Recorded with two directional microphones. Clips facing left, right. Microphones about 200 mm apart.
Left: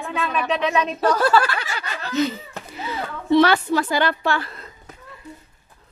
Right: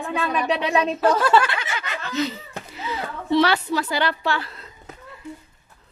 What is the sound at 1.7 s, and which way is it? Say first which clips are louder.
Snicker: left 4 dB; 35° left (ahead or behind).